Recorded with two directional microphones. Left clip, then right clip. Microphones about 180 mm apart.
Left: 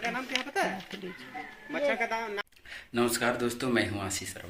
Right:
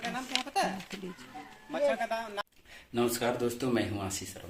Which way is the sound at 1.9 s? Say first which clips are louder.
Left 2 dB; 90° right.